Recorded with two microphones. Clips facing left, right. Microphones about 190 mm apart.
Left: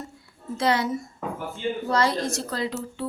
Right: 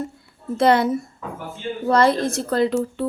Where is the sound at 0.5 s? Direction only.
55° right (ahead or behind).